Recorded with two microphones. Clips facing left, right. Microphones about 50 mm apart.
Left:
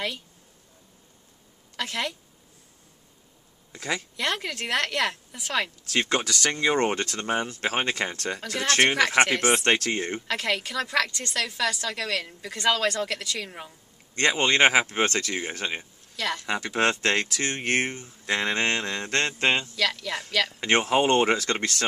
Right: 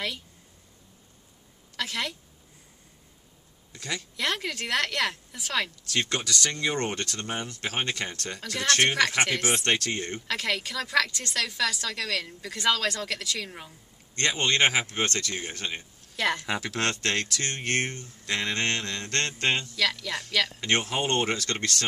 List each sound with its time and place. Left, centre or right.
1.8 s a woman's voice: centre
3.7 s speech: left
4.2 s a woman's voice: centre
5.9 s speech: left
10.2 s a woman's voice: centre
14.1 s speech: left
16.2 s speech: centre
16.4 s a woman's voice: centre
16.7 s speech: centre
19.8 s a woman's voice: centre
20.4 s speech: left